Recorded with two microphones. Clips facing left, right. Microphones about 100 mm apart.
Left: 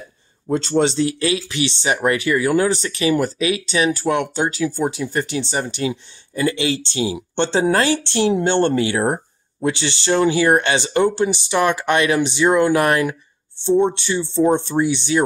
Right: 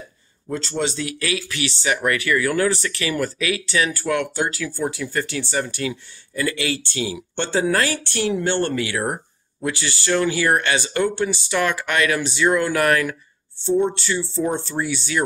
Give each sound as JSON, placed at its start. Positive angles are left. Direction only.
{"t": 0.5, "sound": "speech", "side_deg": 30}